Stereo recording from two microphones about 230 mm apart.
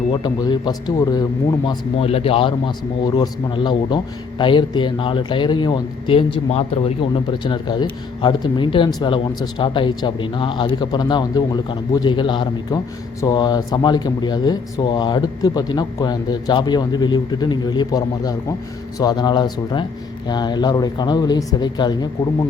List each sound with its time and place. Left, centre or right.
0.1 s speech: centre